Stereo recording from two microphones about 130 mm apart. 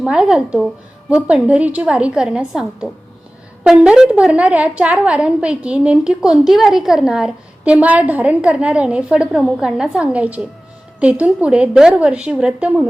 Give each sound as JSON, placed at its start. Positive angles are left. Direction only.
{"t": 0.0, "sound": "a woman's voice", "side_deg": -5}